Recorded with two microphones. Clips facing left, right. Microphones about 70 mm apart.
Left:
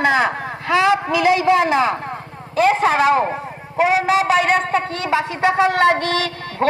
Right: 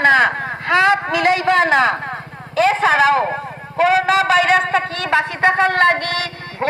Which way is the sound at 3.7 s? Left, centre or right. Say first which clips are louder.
Right 2 dB; centre.